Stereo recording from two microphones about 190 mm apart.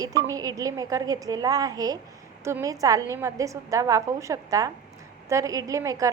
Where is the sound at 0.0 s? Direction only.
20° right (ahead or behind).